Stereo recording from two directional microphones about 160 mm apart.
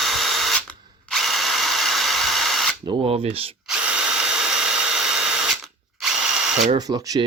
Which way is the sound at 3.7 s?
5° right (ahead or behind).